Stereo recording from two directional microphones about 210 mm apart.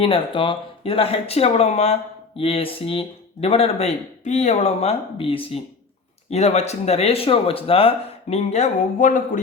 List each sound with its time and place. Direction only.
0.0 s speech: 25° left (ahead or behind)